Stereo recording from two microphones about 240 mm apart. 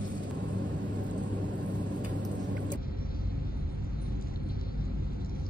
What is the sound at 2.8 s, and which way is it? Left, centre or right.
Vehicle, left.